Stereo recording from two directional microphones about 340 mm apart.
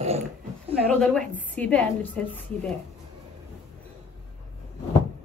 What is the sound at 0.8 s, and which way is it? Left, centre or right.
A woman's voice, centre.